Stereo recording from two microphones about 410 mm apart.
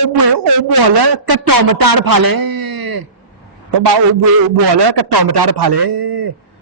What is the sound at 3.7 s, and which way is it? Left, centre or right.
A man's voice, right.